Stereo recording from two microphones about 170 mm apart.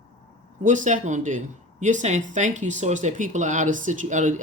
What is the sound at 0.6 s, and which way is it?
Speech, 50° right (ahead or behind).